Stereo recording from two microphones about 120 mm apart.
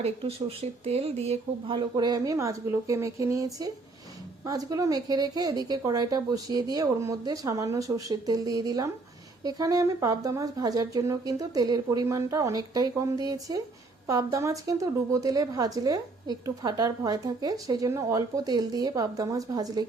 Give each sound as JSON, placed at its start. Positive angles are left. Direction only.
{"t": 0.0, "sound": "a woman's voice", "side_deg": -55}